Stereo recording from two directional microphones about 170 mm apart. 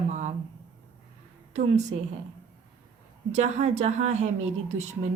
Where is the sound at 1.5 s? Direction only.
40° right (ahead or behind).